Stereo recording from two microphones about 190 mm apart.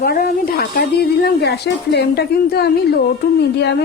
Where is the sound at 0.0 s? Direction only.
50° left (ahead or behind).